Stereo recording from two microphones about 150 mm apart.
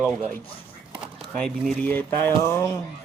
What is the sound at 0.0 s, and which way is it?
Speech, 10° right (ahead or behind).